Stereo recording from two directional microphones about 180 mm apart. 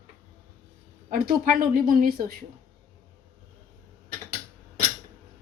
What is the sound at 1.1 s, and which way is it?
Speech, 55° right (ahead or behind).